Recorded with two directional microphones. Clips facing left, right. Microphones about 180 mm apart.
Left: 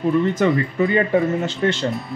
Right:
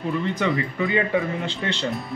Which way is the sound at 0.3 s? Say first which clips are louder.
Left 5 dB; 45° left (ahead or behind).